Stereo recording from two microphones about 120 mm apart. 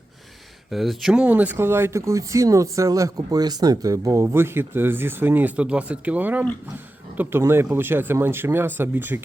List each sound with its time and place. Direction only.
0.7 s speech: centre (ahead or behind); by 9.2 s 15° right (ahead or behind)